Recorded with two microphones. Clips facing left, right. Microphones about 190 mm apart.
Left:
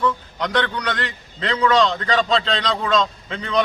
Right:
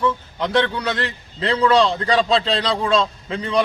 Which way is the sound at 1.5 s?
30° right (ahead or behind).